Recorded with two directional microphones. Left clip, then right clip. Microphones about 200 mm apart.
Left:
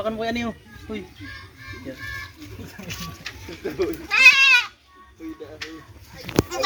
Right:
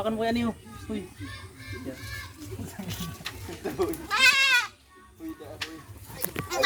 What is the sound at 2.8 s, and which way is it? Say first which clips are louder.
Speech: left 6 dB; 70° right (ahead or behind).